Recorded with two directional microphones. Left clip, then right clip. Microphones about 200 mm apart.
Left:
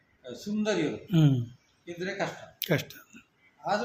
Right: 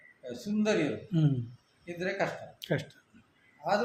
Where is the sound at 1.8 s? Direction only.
15° right (ahead or behind).